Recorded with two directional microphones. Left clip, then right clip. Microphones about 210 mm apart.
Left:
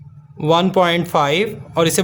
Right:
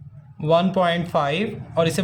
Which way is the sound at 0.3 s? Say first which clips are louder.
Left 4 dB; 35° left (ahead or behind).